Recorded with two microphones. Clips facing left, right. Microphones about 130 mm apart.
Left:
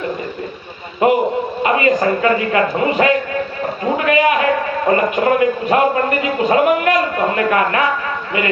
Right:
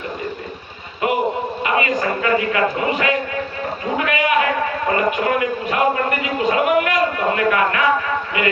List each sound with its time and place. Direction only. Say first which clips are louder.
1.0 s a man's voice: left 5 dB; 30° left (ahead or behind)
3.9 s a sound: left 5 dB; 35° left (ahead or behind)
4.9 s a man's voice: left 5 dB; 35° left (ahead or behind)